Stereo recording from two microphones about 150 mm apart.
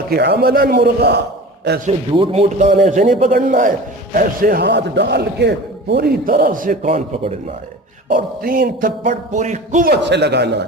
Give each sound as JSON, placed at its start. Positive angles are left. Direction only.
{"t": 0.1, "sound": "a man's voice", "side_deg": -90}
{"t": 2.1, "sound": "speech", "side_deg": -40}
{"t": 2.6, "sound": "a man's voice", "side_deg": -55}
{"t": 8.1, "sound": "speech", "side_deg": -70}
{"t": 9.8, "sound": "a man's voice", "side_deg": -90}